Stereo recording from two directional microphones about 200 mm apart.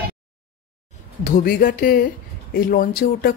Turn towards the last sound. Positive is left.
turn(degrees=45)  # may be behind; listen again after turning